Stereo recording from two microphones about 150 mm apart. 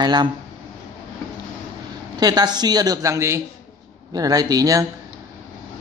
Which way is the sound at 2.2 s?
25° right (ahead or behind).